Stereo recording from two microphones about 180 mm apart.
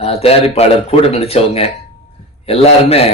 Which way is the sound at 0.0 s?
35° left (ahead or behind).